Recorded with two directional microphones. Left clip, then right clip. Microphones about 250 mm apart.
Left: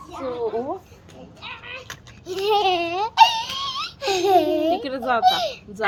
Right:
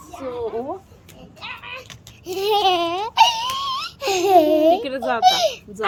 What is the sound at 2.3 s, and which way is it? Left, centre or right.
Baby cry, right.